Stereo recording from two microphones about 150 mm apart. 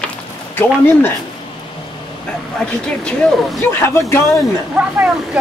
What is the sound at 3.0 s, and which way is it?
Speech, 5° left (ahead or behind).